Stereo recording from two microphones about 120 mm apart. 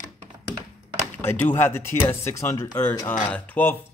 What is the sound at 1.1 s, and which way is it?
Speech, 15° left (ahead or behind).